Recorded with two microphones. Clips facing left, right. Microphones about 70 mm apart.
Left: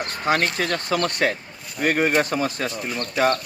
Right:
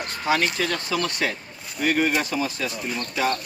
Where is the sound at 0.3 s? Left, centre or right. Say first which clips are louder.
Left 1 dB; left.